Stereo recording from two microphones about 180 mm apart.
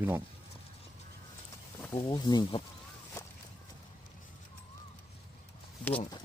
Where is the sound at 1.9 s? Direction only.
20° left (ahead or behind).